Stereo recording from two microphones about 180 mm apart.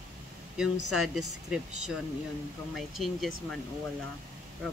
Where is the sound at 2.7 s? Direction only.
Centre (ahead or behind).